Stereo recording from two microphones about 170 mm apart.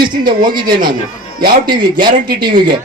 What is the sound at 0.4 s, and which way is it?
A man's voice, 25° right (ahead or behind).